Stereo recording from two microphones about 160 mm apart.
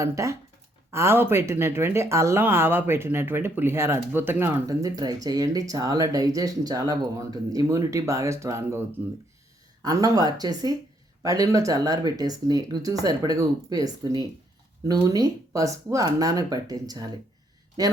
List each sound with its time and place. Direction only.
0.0 s speech: 20° right (ahead or behind)
9.8 s speech: 25° right (ahead or behind)